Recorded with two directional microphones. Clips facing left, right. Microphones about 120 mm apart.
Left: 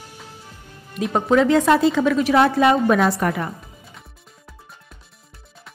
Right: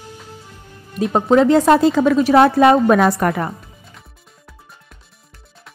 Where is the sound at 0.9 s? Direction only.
35° right (ahead or behind); by 3.5 s 55° right (ahead or behind).